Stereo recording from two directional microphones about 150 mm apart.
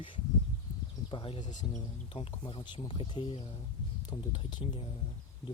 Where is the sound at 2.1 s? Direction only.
35° left (ahead or behind).